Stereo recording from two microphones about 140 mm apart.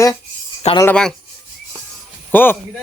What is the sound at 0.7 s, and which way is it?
Speech, 50° left (ahead or behind).